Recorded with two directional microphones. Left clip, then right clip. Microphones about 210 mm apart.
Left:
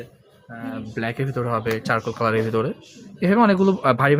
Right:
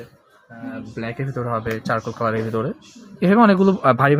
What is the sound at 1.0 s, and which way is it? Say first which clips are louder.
Speech: left 2 dB; 15° left (ahead or behind).